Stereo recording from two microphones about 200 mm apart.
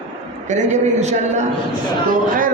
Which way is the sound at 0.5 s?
35° right (ahead or behind).